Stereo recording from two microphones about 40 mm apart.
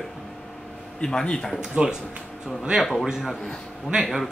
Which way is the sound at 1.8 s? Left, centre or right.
Right.